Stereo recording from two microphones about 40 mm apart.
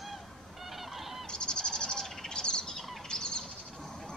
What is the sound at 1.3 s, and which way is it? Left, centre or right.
Bird, left.